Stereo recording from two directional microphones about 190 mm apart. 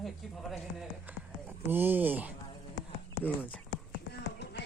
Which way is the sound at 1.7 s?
10° right (ahead or behind).